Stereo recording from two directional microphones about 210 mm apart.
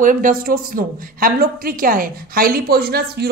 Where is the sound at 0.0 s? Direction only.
40° right (ahead or behind).